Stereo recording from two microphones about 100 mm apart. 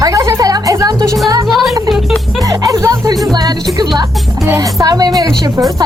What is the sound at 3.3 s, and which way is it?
A woman's voice, 45° right (ahead or behind).